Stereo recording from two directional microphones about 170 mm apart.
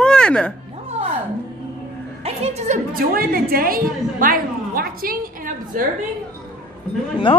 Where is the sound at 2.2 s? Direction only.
40° right (ahead or behind); by 5.9 s 55° right (ahead or behind).